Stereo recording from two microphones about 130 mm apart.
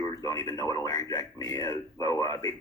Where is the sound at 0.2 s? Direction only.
25° left (ahead or behind).